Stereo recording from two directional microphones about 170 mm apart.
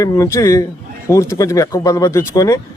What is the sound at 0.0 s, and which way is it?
Speech, 20° left (ahead or behind).